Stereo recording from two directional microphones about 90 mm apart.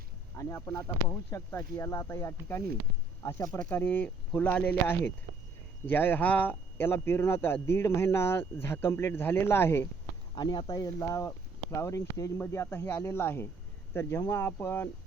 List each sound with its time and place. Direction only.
0.3 s speech: 35° left (ahead or behind)
3.6 s speech: 20° left (ahead or behind)
10.3 s speech: 55° left (ahead or behind); by 14.8 s 25° left (ahead or behind)